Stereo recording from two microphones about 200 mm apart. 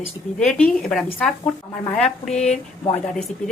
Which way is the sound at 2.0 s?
35° left (ahead or behind).